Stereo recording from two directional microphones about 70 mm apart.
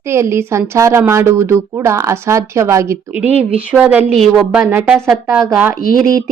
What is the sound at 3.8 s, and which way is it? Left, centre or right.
Speech, right.